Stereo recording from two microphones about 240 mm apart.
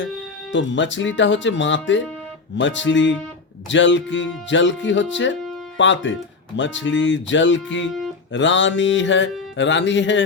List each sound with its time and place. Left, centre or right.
0.5 s speech: left